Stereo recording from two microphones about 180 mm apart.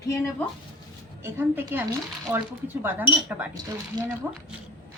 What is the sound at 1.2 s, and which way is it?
A woman's voice, 10° right (ahead or behind).